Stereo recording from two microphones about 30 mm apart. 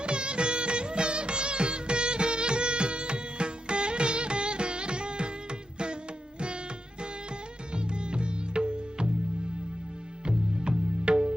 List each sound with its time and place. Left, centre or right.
0.0 s music of bollywood: right
7.7 s music: right
10.2 s music: right